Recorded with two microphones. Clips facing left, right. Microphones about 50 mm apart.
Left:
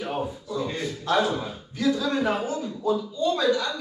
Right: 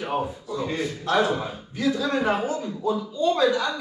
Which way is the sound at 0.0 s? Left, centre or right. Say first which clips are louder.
Right 2 dB; centre.